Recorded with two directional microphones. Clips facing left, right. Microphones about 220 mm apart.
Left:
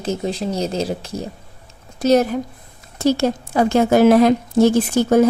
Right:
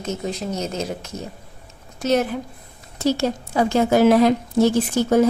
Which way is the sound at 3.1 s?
50° left (ahead or behind).